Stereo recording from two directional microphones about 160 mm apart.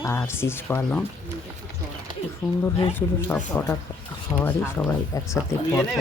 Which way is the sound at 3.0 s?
10° left (ahead or behind).